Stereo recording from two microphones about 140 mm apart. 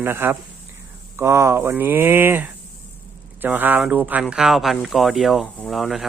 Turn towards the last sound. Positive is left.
turn(degrees=0)  # may be behind; listen again after turning